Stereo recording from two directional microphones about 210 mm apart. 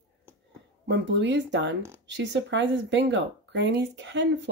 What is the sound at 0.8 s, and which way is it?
Speech, 55° right (ahead or behind).